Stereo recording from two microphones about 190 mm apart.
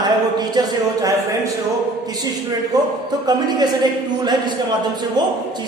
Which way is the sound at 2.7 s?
20° right (ahead or behind).